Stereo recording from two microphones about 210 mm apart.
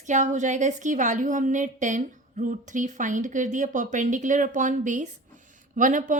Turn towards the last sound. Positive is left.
turn(degrees=-35)  # may be behind; listen again after turning